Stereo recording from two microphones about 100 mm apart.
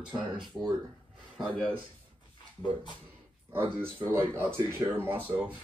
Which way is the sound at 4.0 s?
20° right (ahead or behind).